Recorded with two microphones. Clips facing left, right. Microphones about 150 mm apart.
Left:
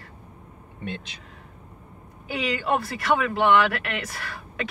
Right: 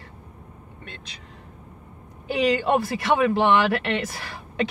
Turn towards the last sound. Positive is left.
turn(degrees=-25)  # may be behind; listen again after turning